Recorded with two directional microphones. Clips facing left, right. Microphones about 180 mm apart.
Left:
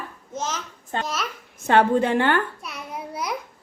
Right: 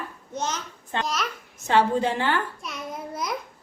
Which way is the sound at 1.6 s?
60° left (ahead or behind).